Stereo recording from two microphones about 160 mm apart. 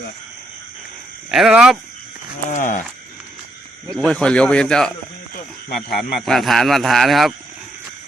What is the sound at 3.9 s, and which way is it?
Speech, 5° left (ahead or behind).